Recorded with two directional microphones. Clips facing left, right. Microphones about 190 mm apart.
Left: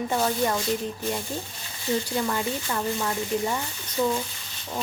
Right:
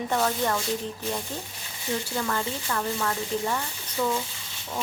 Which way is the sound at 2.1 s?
15° left (ahead or behind).